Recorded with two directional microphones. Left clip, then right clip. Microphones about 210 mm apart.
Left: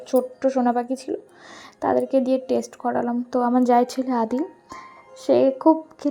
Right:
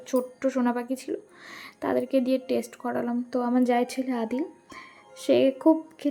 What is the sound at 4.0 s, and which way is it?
Speech, 10° right (ahead or behind).